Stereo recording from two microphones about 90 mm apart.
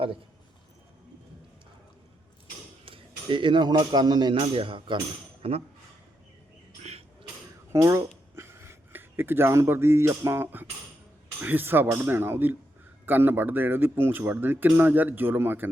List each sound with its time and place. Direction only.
2.8 s a man's voice: 75° right (ahead or behind); by 4.4 s 50° right (ahead or behind)
4.4 s a man's voice: 85° right
5.4 s speech: 90° right
7.7 s speech: 35° right (ahead or behind)